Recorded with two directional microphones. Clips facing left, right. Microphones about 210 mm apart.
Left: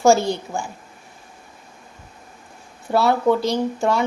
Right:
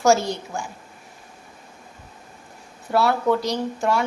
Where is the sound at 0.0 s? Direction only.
30° left (ahead or behind).